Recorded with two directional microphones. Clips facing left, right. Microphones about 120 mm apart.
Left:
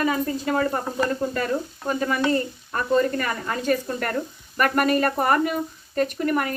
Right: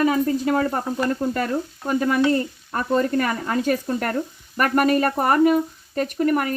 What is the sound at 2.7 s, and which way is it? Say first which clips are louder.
Speech: right 1 dB; 45° right (ahead or behind).